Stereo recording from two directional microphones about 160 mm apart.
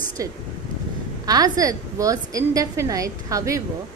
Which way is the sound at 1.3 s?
25° right (ahead or behind).